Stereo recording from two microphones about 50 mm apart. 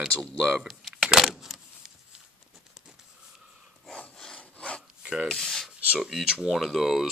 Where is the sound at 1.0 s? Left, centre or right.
Centre.